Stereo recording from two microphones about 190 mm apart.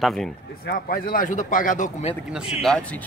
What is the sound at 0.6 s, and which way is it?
Speech, 50° left (ahead or behind).